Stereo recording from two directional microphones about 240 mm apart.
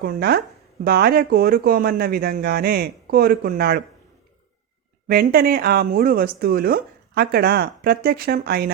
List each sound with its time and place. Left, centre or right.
0.0 s speech: right
5.0 s speech: right